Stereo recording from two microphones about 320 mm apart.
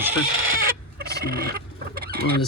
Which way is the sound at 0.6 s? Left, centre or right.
Right.